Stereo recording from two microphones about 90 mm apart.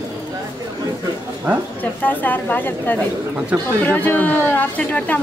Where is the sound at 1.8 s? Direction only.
20° left (ahead or behind).